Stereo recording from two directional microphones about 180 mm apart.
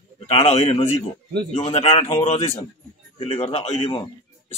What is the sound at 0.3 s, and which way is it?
Speech, 35° left (ahead or behind).